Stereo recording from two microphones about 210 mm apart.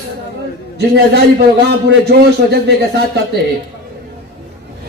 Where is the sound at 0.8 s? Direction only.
50° right (ahead or behind).